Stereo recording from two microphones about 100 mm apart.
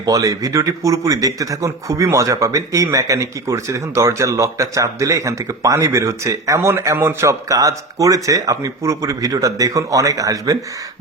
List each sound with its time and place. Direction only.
0.0 s speech: 35° right (ahead or behind)